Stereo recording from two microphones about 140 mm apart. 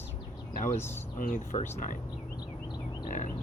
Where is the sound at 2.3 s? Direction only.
35° left (ahead or behind).